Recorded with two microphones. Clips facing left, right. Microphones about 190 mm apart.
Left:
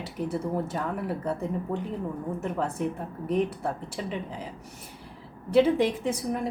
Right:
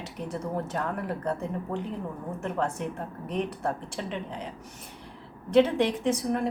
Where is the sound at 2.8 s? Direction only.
5° left (ahead or behind).